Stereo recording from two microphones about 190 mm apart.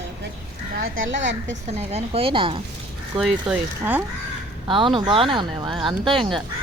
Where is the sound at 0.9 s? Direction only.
75° right (ahead or behind).